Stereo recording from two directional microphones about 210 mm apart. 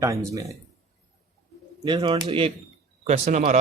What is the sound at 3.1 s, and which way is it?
Speech, 35° right (ahead or behind).